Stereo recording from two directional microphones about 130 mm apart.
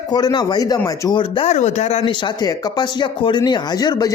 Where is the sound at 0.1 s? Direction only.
30° left (ahead or behind).